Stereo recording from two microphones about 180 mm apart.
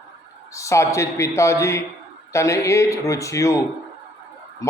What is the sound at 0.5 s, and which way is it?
A man's voice, 15° left (ahead or behind).